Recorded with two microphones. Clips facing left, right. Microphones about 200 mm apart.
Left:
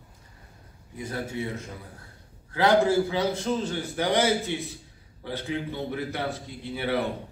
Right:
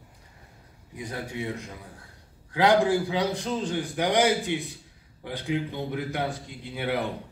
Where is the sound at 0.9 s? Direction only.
15° right (ahead or behind).